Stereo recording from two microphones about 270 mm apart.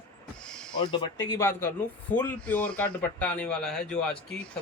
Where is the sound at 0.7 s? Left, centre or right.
Centre.